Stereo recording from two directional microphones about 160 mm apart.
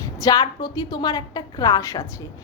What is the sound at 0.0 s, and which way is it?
A woman's voice, 20° left (ahead or behind).